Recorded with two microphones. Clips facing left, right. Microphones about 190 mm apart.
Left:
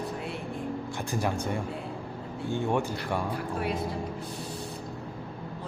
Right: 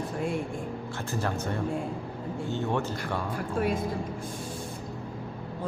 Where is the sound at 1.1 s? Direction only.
15° left (ahead or behind).